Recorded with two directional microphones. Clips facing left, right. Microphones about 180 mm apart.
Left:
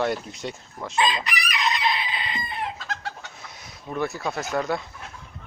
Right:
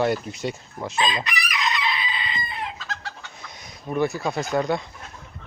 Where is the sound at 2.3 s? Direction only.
55° left (ahead or behind).